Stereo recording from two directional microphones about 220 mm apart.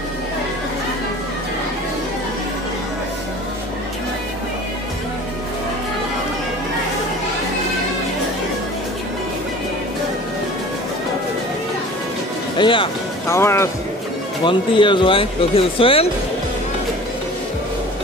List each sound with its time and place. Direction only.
12.5 s speech: 20° left (ahead or behind)
13.3 s speech: 10° left (ahead or behind)